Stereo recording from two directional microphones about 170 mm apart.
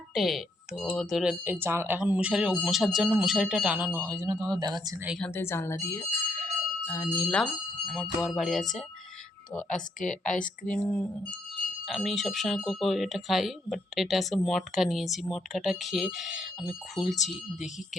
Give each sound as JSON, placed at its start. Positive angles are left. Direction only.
{"t": 0.1, "sound": "speech", "side_deg": 0}
{"t": 5.0, "sound": "speech", "side_deg": 0}
{"t": 5.3, "sound": "speech", "side_deg": 15}
{"t": 10.0, "sound": "a woman's voice", "side_deg": 50}
{"t": 10.7, "sound": "speech", "side_deg": 5}